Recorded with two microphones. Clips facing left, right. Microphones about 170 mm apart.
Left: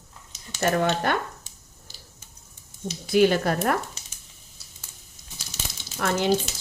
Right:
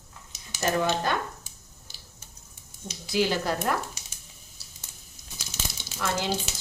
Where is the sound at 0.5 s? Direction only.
65° left (ahead or behind).